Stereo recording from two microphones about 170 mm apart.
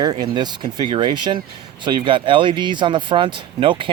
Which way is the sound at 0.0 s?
25° right (ahead or behind).